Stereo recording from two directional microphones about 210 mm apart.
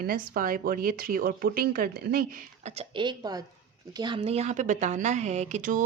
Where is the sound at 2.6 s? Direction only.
30° right (ahead or behind).